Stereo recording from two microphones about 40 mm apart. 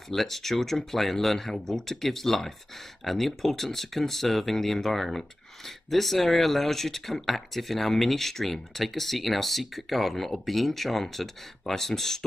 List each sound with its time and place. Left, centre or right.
0.1 s speech: centre